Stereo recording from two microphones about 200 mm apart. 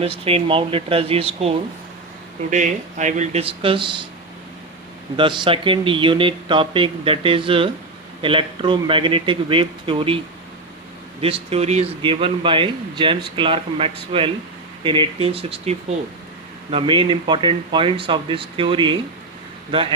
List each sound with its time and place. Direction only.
0.3 s a man's voice: 30° right (ahead or behind)
5.1 s a man's voice: 25° right (ahead or behind)
11.2 s a man's voice: 30° right (ahead or behind)